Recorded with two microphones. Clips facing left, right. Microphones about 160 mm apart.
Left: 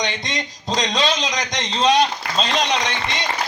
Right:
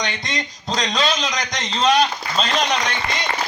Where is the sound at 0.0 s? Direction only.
15° left (ahead or behind).